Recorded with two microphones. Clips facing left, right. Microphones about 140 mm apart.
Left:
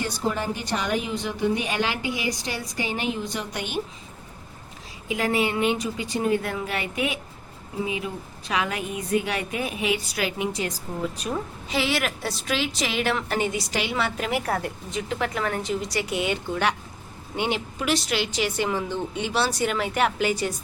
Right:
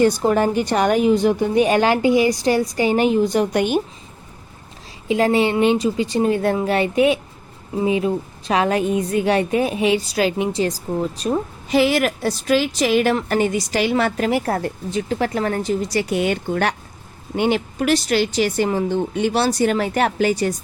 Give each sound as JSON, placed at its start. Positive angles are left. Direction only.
{"t": 0.0, "sound": "a woman's voice", "side_deg": -55}
{"t": 5.0, "sound": "a woman's voice", "side_deg": -30}